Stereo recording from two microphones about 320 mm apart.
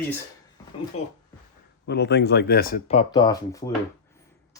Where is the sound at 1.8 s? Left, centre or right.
Left.